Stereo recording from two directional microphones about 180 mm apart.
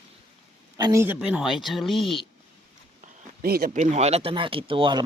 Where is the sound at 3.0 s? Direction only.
55° right (ahead or behind).